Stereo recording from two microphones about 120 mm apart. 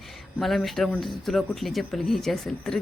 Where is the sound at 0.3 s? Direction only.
Centre (ahead or behind).